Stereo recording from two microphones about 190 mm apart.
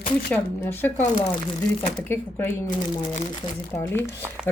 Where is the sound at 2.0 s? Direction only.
10° left (ahead or behind).